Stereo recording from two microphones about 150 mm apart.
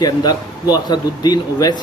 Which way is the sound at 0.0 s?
25° left (ahead or behind).